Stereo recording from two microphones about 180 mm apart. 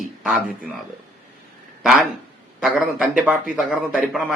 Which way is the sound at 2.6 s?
5° right (ahead or behind).